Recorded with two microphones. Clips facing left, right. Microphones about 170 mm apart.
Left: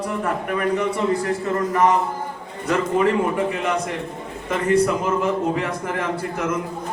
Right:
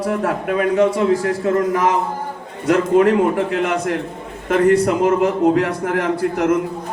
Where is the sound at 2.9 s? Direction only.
70° right (ahead or behind).